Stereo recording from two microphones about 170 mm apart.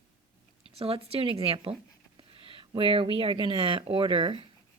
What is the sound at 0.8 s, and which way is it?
Speech, 35° right (ahead or behind).